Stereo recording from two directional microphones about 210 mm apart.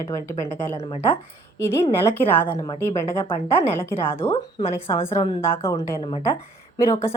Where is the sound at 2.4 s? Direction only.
20° left (ahead or behind).